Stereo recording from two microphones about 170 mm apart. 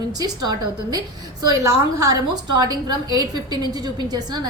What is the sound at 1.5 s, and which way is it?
A woman's voice, 20° right (ahead or behind).